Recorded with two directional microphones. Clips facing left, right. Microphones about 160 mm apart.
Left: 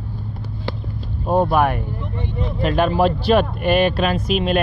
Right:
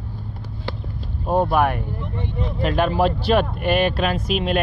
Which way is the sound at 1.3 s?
30° left (ahead or behind).